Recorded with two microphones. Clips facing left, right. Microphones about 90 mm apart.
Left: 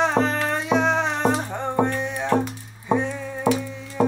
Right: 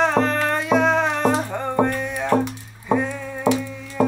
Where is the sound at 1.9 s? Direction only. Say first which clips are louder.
Right 1 dB; 30° left (ahead or behind).